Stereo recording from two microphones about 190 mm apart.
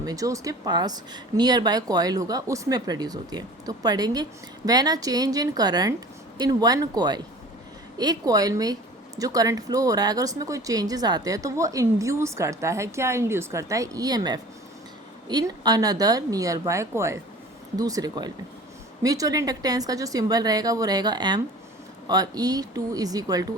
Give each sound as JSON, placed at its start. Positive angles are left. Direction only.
{"t": 0.0, "sound": "speech", "side_deg": -20}